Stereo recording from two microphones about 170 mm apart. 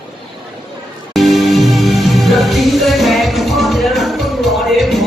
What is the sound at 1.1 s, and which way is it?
Music, centre (ahead or behind).